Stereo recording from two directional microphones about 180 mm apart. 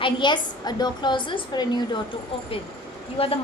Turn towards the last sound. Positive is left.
turn(degrees=30)  # may be behind; listen again after turning